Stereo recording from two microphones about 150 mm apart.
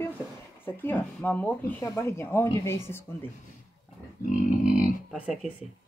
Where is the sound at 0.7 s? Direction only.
15° left (ahead or behind).